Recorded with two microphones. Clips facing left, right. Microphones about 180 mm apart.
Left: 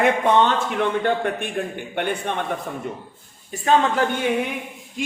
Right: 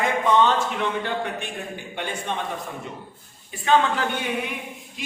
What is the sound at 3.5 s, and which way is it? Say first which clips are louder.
Speech: left 2 dB; 40° left (ahead or behind).